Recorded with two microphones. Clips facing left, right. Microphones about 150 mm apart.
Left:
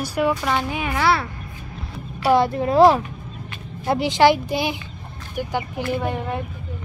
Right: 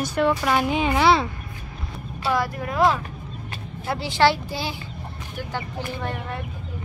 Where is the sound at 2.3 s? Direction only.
25° left (ahead or behind).